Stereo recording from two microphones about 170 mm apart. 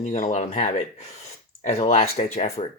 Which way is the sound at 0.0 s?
50° left (ahead or behind).